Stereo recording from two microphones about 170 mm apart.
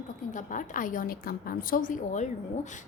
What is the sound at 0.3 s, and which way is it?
A woman's voice, 50° left (ahead or behind).